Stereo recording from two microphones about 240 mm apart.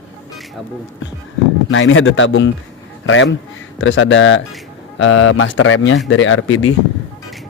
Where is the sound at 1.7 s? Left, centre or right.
Left.